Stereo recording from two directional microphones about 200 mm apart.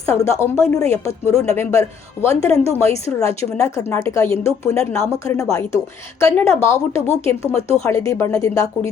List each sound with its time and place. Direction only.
0.3 s a woman's voice: 15° left (ahead or behind)